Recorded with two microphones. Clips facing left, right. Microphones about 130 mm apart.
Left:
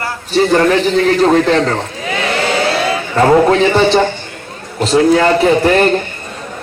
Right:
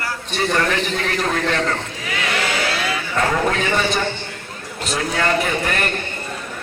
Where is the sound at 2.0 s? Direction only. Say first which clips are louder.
Left 7 dB; 30° left (ahead or behind).